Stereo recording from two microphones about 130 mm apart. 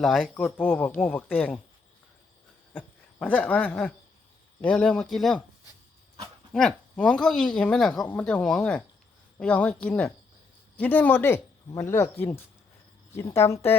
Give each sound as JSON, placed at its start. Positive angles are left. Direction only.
{"t": 0.0, "sound": "speech", "side_deg": 0}
{"t": 2.7, "sound": "a sound", "side_deg": 10}
{"t": 4.6, "sound": "speech", "side_deg": 10}
{"t": 6.5, "sound": "speech", "side_deg": 5}
{"t": 13.1, "sound": "speech", "side_deg": 20}